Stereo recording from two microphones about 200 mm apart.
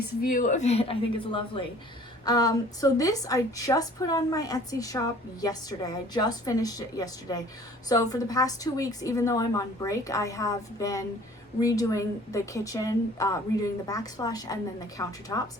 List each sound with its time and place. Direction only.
0.0 s a woman's voice: 45° left (ahead or behind); by 15.4 s 15° left (ahead or behind)